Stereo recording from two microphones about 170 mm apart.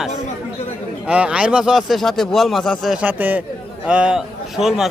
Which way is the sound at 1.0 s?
5° right (ahead or behind).